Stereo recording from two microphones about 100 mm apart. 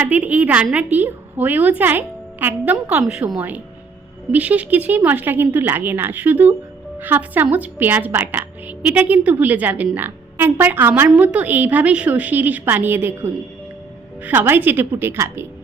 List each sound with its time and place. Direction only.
0.0 s a woman's voice: 15° right (ahead or behind)